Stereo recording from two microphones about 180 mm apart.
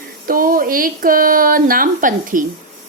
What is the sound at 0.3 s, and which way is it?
Speech, 50° right (ahead or behind).